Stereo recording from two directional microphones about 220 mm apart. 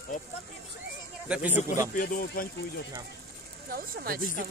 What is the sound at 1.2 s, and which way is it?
Speech, 5° right (ahead or behind).